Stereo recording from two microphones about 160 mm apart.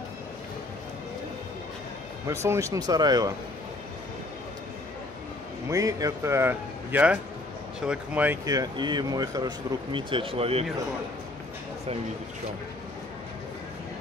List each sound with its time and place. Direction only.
2.2 s speech: 15° right (ahead or behind)
5.7 s a man's voice: 20° right (ahead or behind)
8.5 s speech: 25° right (ahead or behind)
9.9 s speech: 35° right (ahead or behind)